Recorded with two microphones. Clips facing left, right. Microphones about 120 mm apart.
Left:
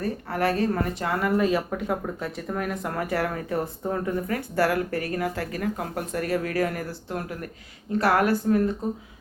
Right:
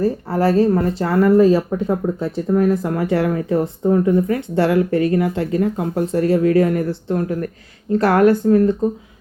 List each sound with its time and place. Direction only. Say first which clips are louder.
0.0 s speech: right 8 dB; 30° right (ahead or behind)
7.9 s speech: right 8 dB; 45° right (ahead or behind)